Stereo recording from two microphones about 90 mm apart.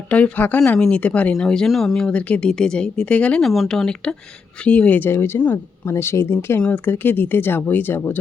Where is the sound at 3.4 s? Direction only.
Centre (ahead or behind); by 8.1 s 25° left (ahead or behind).